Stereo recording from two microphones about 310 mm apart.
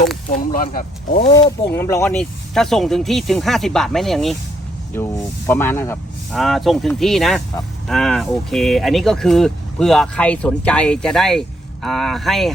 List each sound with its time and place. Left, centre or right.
0.3 s speech: left
1.3 s speech: centre